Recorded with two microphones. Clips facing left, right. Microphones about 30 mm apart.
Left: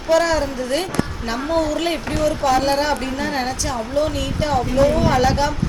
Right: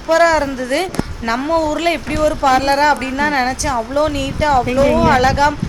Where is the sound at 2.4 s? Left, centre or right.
Right.